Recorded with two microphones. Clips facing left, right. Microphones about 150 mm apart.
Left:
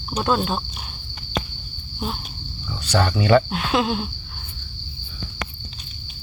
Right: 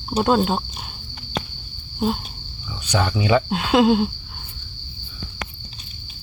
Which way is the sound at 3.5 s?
25° right (ahead or behind).